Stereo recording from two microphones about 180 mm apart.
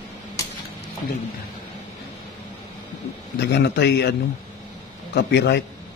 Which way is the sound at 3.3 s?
70° left (ahead or behind).